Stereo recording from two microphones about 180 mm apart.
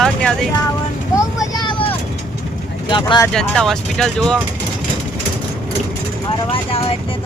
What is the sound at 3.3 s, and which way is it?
Speech, centre (ahead or behind).